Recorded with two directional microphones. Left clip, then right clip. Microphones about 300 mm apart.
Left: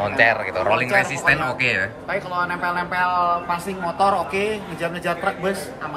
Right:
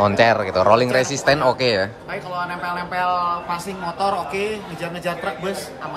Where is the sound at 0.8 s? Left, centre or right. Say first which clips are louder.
Even; centre.